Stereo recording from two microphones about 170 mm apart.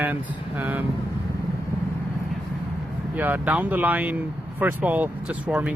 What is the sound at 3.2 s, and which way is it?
Speech, 10° right (ahead or behind).